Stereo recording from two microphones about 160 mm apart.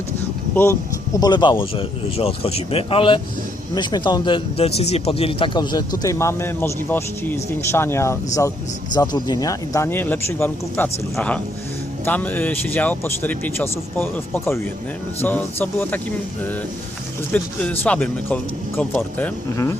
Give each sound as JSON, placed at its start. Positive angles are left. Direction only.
{"t": 0.5, "sound": "speech", "side_deg": 15}
{"t": 12.0, "sound": "speech", "side_deg": 10}
{"t": 17.3, "sound": "speech", "side_deg": 10}